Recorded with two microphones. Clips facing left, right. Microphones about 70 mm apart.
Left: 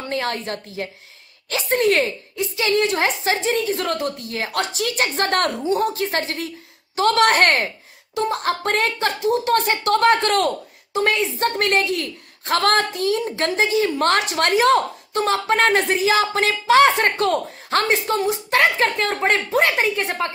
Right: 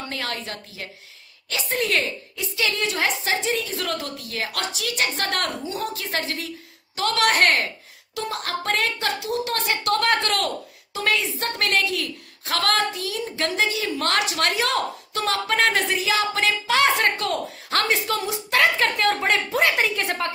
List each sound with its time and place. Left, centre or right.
0.1 s speech: left
7.5 s speech: left